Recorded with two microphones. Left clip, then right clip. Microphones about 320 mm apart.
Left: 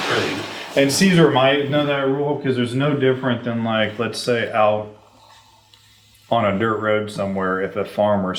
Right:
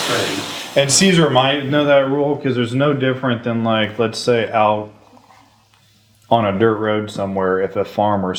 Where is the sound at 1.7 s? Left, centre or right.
Right.